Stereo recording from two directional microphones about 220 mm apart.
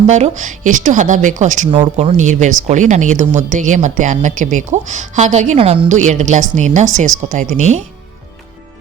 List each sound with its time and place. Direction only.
0.1 s speech: 35° right (ahead or behind)